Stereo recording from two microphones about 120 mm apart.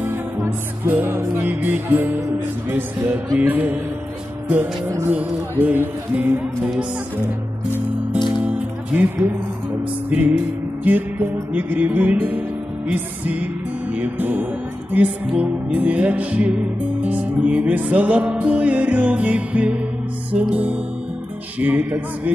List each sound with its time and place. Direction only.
0.0 s music: 15° right (ahead or behind)
3.3 s music: 15° right (ahead or behind)
4.8 s speech: 30° right (ahead or behind)
5.1 s music: 15° right (ahead or behind)
8.5 s music: 15° right (ahead or behind)
21.5 s music: 15° right (ahead or behind)